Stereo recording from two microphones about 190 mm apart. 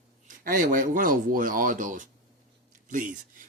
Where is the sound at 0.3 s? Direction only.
45° right (ahead or behind).